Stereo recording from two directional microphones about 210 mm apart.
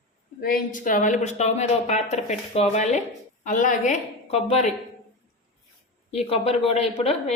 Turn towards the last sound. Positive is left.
turn(degrees=30)  # may be behind; listen again after turning